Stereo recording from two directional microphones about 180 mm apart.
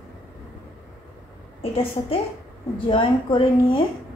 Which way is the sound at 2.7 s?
30° left (ahead or behind).